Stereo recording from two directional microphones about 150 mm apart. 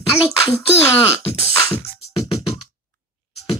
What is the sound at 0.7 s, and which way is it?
Music, 15° left (ahead or behind).